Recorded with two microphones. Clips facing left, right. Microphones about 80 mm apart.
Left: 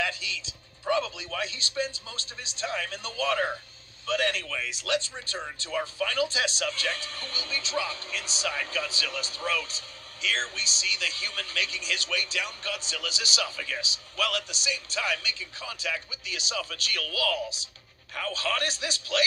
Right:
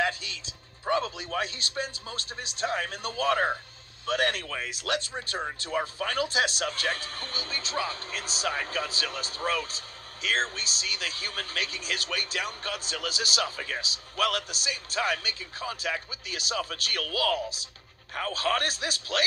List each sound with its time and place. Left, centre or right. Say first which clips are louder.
0.0 s speech: right 2 dB; right